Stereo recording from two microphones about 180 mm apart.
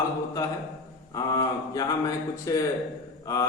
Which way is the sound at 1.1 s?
20° left (ahead or behind).